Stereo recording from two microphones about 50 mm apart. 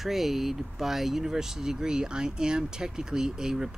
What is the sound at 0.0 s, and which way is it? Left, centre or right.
Speech, centre.